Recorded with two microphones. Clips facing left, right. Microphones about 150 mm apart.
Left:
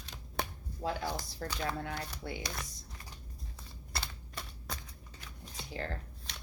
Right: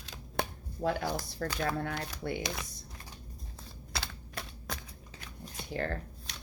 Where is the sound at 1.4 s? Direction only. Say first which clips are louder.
Right 5 dB; 60° right (ahead or behind).